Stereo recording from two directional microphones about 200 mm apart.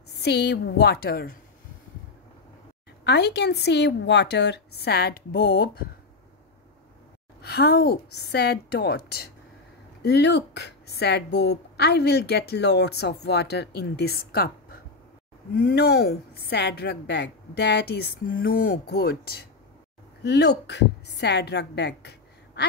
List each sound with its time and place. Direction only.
0.1 s a woman's voice: 55° left (ahead or behind)
3.0 s speech: 55° left (ahead or behind)
7.4 s a woman's voice: 55° left (ahead or behind)